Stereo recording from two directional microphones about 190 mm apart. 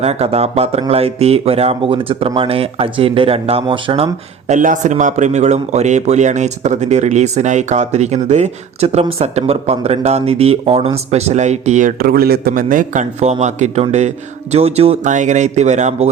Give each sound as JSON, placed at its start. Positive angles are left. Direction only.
{"t": 0.0, "sound": "speech", "side_deg": -35}